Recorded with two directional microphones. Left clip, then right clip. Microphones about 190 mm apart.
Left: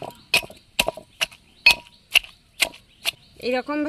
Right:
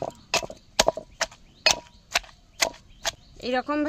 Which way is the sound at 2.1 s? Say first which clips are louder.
Left 6 dB; 15° right (ahead or behind).